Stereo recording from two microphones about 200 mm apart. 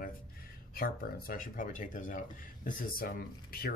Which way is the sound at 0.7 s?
45° left (ahead or behind).